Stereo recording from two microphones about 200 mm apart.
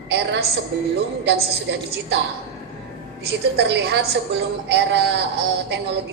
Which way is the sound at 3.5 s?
60° right (ahead or behind).